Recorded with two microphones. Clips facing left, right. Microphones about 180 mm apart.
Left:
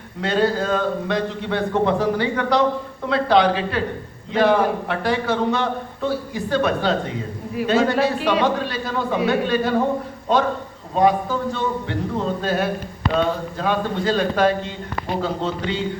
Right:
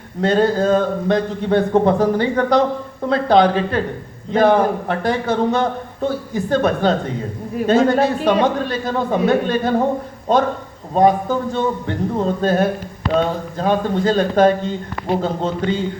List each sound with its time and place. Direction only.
0.2 s a man's voice: 45° right (ahead or behind)